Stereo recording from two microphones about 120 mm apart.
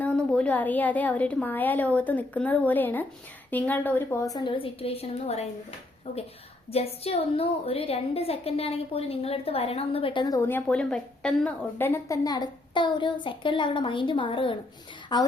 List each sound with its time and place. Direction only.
0.0 s a woman's voice: 10° left (ahead or behind); by 4.5 s 30° left (ahead or behind)
4.5 s a woman's voice: 50° left (ahead or behind)
6.7 s a woman's voice: 55° left (ahead or behind)
10.3 s speech: 20° left (ahead or behind)
10.7 s a woman's voice: 10° left (ahead or behind)
11.8 s a woman's voice: 20° left (ahead or behind)